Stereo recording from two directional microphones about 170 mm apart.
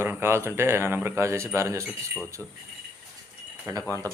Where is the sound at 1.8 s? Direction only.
Centre (ahead or behind).